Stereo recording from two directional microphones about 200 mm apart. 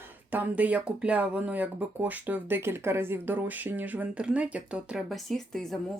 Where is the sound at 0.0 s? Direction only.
10° right (ahead or behind).